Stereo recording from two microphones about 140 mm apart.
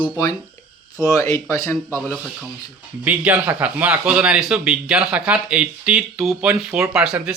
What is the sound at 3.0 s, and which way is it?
Speech, 10° right (ahead or behind).